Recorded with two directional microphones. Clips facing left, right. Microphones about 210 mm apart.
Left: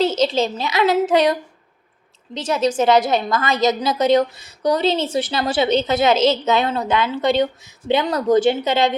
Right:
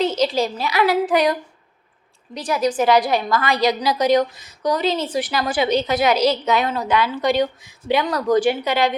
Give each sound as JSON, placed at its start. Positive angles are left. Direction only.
{"t": 0.2, "sound": "a woman's voice", "side_deg": 25}